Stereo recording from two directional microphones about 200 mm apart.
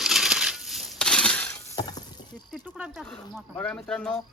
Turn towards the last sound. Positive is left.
turn(degrees=5)  # may be behind; listen again after turning